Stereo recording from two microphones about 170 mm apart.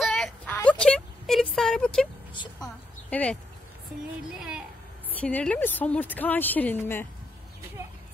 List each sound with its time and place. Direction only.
0.0 s a sound: 5° left (ahead or behind)
0.6 s a woman's voice: 5° left (ahead or behind)
4.4 s a woman's voice: 5° right (ahead or behind)